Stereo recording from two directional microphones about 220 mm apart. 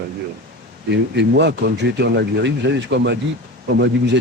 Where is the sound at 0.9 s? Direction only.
50° right (ahead or behind).